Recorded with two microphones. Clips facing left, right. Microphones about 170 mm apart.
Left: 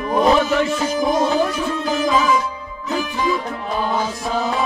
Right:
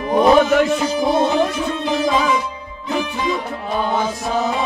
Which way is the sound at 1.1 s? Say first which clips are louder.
Right 2 dB; 25° right (ahead or behind).